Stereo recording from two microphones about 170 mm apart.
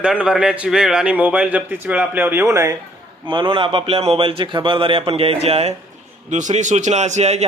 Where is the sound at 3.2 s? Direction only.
30° right (ahead or behind).